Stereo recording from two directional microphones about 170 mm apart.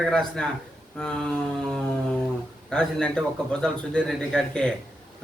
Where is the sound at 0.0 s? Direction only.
5° left (ahead or behind).